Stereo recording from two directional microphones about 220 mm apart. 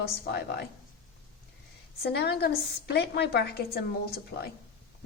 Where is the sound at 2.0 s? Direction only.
45° left (ahead or behind).